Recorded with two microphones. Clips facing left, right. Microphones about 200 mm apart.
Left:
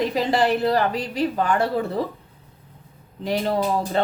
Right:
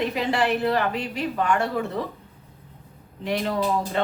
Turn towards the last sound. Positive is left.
turn(degrees=35)  # may be behind; listen again after turning